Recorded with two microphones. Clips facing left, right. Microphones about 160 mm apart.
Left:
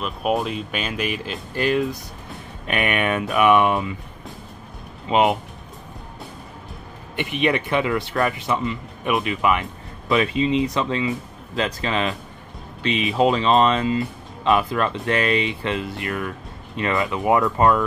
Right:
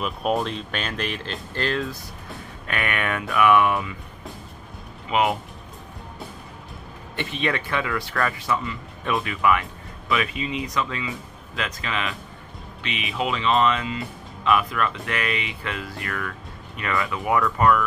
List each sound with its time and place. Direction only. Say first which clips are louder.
0.0 s speech: left 1 dB; centre (ahead or behind); by 3.9 s 25° left (ahead or behind)
5.0 s speech: left 4 dB; 25° left (ahead or behind)
7.2 s speech: left 5 dB; 15° left (ahead or behind)